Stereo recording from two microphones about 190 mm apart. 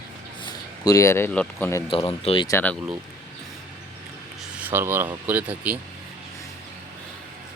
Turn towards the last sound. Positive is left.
turn(degrees=-10)  # may be behind; listen again after turning